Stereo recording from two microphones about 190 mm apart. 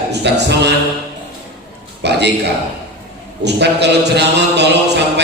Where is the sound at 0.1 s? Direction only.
65° right (ahead or behind).